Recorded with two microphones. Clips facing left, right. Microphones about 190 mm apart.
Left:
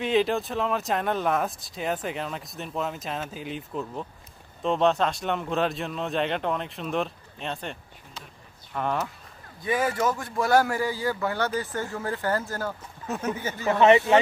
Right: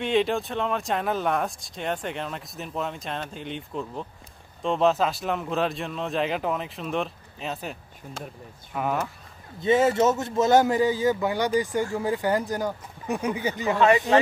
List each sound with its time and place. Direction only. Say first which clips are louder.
0.0 s speech: even; centre (ahead or behind)
8.7 s speech: right 1 dB; 5° right (ahead or behind)
9.6 s speech: right 6 dB; 25° right (ahead or behind)
13.7 s a man's voice: left 3 dB; 20° left (ahead or behind)